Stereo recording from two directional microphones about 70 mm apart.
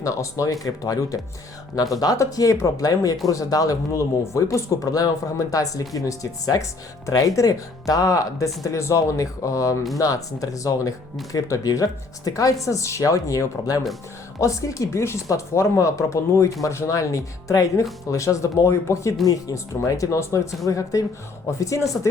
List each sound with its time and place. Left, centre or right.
0.0 s speech: left